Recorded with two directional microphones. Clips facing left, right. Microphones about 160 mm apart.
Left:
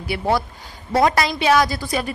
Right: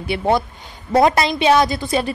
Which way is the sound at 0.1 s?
25° right (ahead or behind).